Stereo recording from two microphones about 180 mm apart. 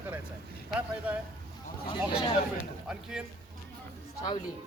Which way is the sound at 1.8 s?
30° left (ahead or behind).